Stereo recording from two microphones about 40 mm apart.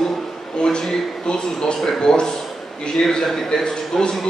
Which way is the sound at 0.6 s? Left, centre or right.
Left.